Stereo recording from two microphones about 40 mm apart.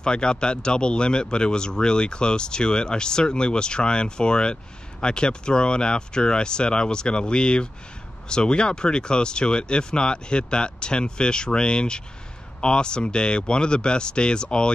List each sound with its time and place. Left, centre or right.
0.0 s speech: left